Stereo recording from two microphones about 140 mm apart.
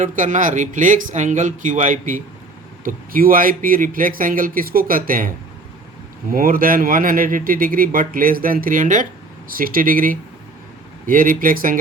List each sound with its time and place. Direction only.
0.0 s speech: 65° right (ahead or behind)
2.8 s speech: 90° right
6.3 s speech: 90° right; by 9.0 s 65° right (ahead or behind)
9.5 s speech: 90° right